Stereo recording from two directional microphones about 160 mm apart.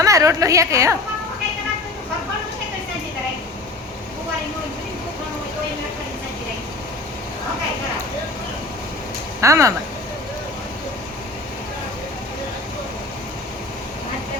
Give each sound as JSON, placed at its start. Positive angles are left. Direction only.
{"t": 0.0, "sound": "a woman's voice", "side_deg": -20}
{"t": 9.4, "sound": "a woman's voice", "side_deg": -20}